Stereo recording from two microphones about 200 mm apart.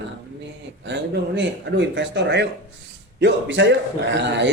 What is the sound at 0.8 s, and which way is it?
A man's voice, 60° right (ahead or behind).